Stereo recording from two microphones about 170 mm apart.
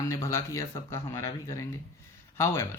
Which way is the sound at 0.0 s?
15° left (ahead or behind).